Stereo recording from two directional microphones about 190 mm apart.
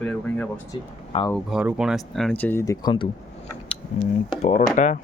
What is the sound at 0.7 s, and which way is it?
Speech, 25° left (ahead or behind).